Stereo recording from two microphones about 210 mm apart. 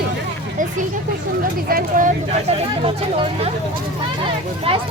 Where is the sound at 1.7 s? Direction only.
40° right (ahead or behind).